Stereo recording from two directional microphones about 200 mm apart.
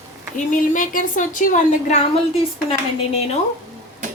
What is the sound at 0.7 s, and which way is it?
A woman's voice, 40° left (ahead or behind).